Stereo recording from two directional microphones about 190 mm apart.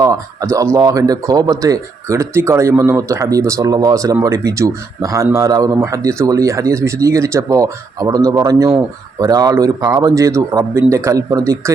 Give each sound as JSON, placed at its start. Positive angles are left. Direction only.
{"t": 0.0, "sound": "speech", "side_deg": -15}